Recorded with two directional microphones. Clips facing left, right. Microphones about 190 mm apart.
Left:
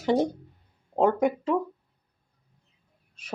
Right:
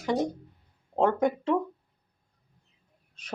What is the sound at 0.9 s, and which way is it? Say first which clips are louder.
Speech: left 2 dB; 10° left (ahead or behind).